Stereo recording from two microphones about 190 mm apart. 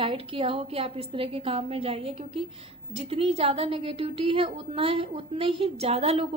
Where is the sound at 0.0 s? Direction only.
30° right (ahead or behind).